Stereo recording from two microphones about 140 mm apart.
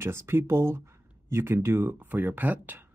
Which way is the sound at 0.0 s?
15° right (ahead or behind).